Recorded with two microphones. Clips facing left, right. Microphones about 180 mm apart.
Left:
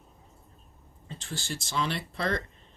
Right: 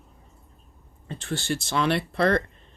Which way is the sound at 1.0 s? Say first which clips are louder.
Right 9 dB; 65° right (ahead or behind).